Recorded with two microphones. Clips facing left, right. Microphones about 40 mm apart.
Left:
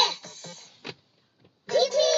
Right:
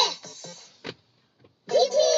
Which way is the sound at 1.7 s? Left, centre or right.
Left.